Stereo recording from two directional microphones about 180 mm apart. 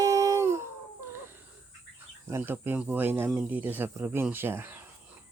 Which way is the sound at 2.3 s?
10° right (ahead or behind).